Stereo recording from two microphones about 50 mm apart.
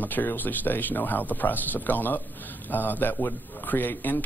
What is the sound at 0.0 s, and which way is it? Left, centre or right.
Speech, left.